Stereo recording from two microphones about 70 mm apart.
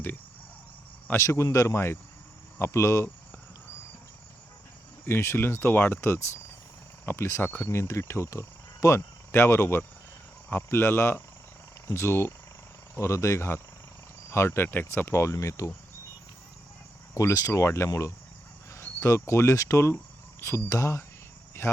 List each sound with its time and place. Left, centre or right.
1.2 s speech: left
1.6 s speech: left
5.0 s speech: left
17.2 s speech: left
18.7 s insect: left
20.7 s speech: left